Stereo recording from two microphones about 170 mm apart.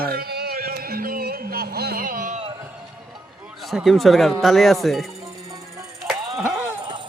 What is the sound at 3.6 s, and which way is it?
Speech, centre (ahead or behind).